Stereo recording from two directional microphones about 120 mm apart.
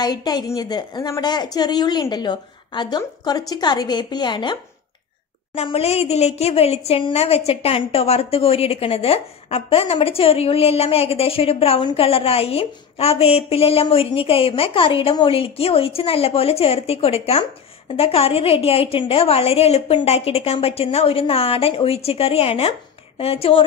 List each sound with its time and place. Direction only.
0.0 s a woman's voice: 35° left (ahead or behind)
5.5 s a woman's voice: 55° left (ahead or behind)